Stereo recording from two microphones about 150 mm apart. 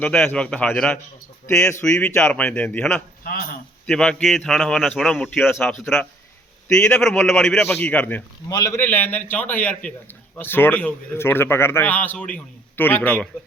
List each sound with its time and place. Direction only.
0.0 s a man's voice: 10° left (ahead or behind)
3.3 s speech: 80° left
3.8 s a man's voice: 5° left (ahead or behind)
8.4 s a man's voice: 20° left (ahead or behind)